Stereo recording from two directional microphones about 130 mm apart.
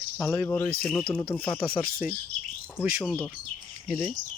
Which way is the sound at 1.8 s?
90° left.